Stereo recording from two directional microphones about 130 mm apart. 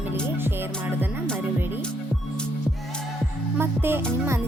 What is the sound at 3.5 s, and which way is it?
Music, 15° right (ahead or behind).